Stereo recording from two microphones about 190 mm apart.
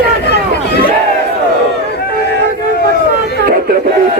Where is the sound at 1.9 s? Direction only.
55° left (ahead or behind).